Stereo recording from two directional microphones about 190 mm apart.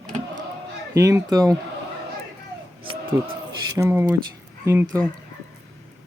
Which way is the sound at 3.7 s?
15° right (ahead or behind).